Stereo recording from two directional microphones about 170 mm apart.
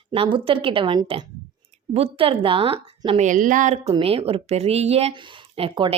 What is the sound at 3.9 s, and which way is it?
Speech, 35° right (ahead or behind).